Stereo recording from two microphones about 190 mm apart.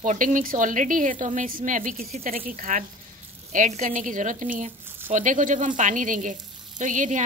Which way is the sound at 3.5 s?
40° right (ahead or behind).